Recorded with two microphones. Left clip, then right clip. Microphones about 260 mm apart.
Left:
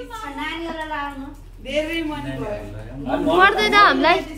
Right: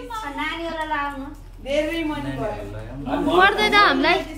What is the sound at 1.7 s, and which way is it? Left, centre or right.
Speech, centre.